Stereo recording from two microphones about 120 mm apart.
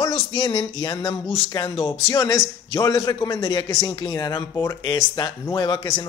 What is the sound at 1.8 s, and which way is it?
Speech, 35° left (ahead or behind).